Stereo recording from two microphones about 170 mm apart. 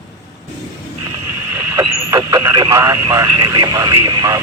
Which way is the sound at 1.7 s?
20° right (ahead or behind).